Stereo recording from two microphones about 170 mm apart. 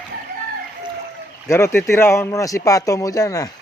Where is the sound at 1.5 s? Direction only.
15° left (ahead or behind).